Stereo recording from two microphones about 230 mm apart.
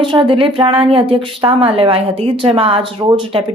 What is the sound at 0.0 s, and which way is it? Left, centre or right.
A woman's voice, right.